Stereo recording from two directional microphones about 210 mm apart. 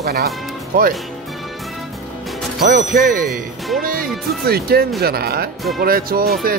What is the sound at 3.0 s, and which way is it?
Speech, 40° right (ahead or behind).